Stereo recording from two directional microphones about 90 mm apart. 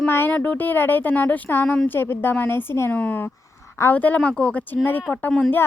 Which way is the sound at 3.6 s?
30° left (ahead or behind).